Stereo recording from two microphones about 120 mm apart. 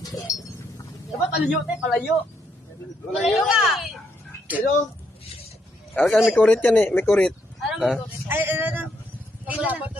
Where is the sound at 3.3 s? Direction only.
5° right (ahead or behind).